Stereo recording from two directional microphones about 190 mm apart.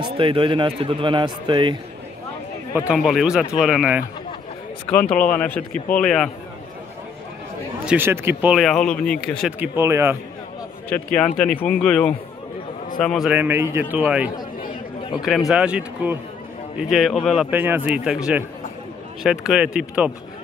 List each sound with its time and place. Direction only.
0.0 s speech: 25° right (ahead or behind)
2.9 s speech: centre (ahead or behind)
5.1 s speech: 5° left (ahead or behind)
7.8 s speech: 10° right (ahead or behind)
9.6 s a man's voice: 15° right (ahead or behind)
11.1 s speech: 5° left (ahead or behind)
13.3 s a man's voice: 10° right (ahead or behind)